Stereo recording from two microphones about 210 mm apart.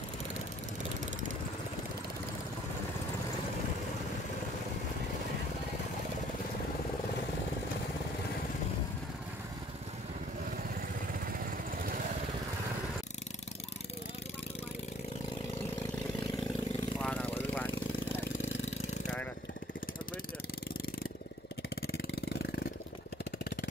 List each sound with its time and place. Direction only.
11.1 s vehicle: 40° right (ahead or behind)
17.0 s a sound: 5° left (ahead or behind)
17.4 s lawn mower: 10° left (ahead or behind)
21.9 s vehicle: 55° left (ahead or behind)